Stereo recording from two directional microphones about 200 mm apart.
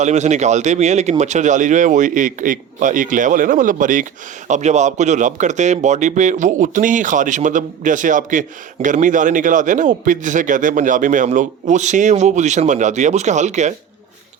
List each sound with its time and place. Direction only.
0.0 s speech: 35° right (ahead or behind)